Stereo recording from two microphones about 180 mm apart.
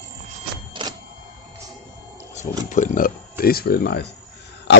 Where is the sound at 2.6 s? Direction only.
45° left (ahead or behind); by 4.0 s 65° left (ahead or behind).